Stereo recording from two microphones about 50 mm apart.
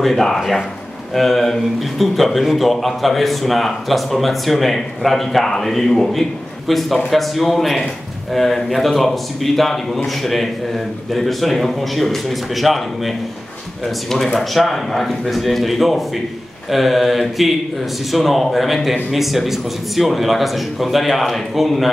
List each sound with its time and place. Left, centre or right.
0.0 s a man's voice: centre